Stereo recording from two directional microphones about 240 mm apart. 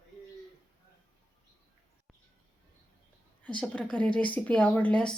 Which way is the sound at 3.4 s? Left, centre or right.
Centre.